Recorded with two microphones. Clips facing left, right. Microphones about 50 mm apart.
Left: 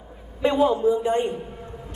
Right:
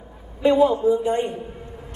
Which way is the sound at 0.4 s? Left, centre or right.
Left.